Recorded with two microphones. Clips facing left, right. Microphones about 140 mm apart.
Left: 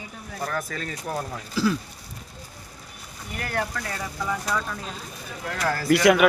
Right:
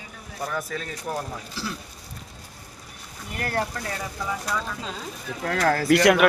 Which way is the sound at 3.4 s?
35° right (ahead or behind).